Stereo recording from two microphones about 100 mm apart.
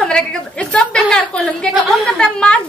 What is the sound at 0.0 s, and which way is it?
A woman's voice, 10° left (ahead or behind).